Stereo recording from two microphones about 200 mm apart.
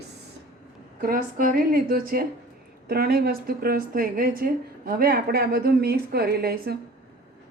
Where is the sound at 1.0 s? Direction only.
45° right (ahead or behind).